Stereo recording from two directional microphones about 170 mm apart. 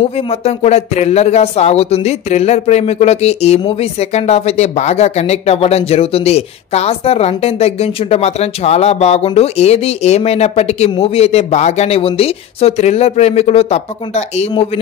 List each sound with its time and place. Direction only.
0.5 s speech: 40° left (ahead or behind)